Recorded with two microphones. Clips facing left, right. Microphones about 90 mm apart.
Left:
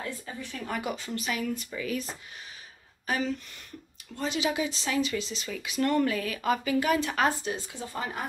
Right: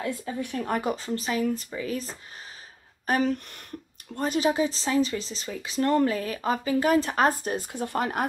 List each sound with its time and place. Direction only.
0.0 s speech: 60° right (ahead or behind); by 2.1 s 35° right (ahead or behind)
3.1 s speech: 50° right (ahead or behind); by 8.3 s 70° right (ahead or behind)